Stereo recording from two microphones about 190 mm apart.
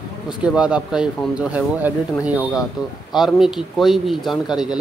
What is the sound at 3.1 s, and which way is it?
Speech, centre (ahead or behind).